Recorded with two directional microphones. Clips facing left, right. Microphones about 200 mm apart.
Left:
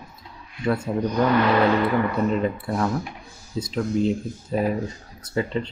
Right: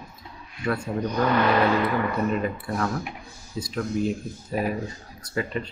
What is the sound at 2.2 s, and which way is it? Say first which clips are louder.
Speech: left 3 dB; 25° left (ahead or behind).